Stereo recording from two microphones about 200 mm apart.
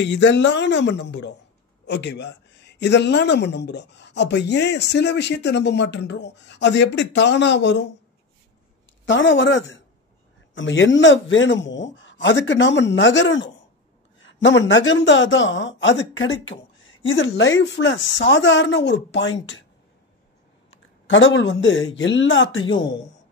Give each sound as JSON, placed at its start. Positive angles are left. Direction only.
{"t": 0.0, "sound": "speech", "side_deg": 60}
{"t": 9.0, "sound": "speech", "side_deg": 65}
{"t": 20.7, "sound": "speech", "side_deg": 70}